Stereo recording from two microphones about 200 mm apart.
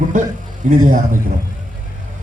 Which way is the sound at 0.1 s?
40° right (ahead or behind).